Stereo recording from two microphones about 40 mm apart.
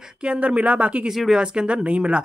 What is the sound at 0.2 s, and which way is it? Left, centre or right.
Speech, right.